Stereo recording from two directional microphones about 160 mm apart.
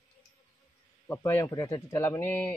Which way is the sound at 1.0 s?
15° left (ahead or behind).